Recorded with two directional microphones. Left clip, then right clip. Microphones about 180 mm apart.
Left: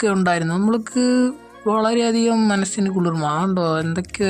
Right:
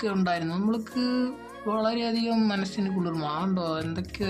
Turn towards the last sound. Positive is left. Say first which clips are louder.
# left 9 dB
turn(degrees=45)  # may be behind; listen again after turning